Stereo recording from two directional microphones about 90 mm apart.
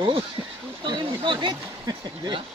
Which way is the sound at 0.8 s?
55° right (ahead or behind).